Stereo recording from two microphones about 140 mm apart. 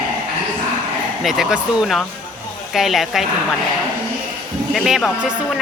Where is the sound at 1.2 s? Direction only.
5° right (ahead or behind).